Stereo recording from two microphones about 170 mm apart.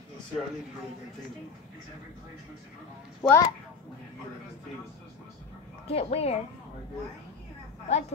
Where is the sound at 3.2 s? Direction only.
20° left (ahead or behind).